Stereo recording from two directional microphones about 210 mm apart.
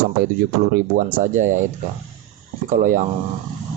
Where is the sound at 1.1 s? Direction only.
40° right (ahead or behind).